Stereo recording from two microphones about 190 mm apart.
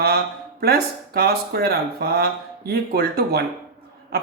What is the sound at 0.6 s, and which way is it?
Speech, 55° right (ahead or behind).